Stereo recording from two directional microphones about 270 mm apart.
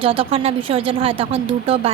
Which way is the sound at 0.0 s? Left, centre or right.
Centre.